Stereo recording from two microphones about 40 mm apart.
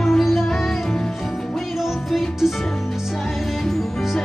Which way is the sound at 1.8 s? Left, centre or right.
Centre.